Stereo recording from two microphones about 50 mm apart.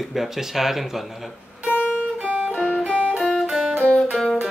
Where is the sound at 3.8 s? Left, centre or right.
Left.